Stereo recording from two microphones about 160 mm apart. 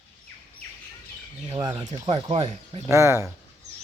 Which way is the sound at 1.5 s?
25° right (ahead or behind).